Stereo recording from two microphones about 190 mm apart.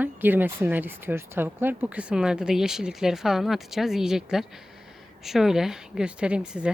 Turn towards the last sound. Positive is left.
turn(degrees=-5)  # may be behind; listen again after turning